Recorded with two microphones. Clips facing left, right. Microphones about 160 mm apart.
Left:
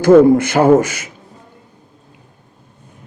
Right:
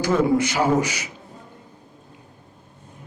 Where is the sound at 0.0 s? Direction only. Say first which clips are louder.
Left 11 dB; 55° left (ahead or behind).